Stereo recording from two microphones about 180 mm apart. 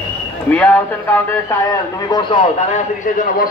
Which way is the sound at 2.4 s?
45° left (ahead or behind).